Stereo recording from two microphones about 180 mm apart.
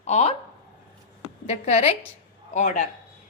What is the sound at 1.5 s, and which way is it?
A woman's voice, 40° left (ahead or behind).